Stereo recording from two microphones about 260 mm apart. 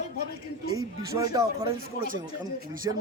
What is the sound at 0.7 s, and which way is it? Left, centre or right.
Speech, centre.